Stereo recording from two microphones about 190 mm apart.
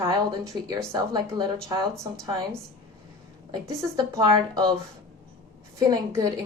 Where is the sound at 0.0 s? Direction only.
15° right (ahead or behind).